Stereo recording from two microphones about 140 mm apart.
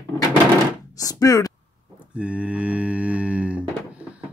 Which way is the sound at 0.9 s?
25° left (ahead or behind).